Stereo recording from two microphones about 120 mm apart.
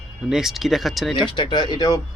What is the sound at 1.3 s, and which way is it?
Speech, 40° left (ahead or behind).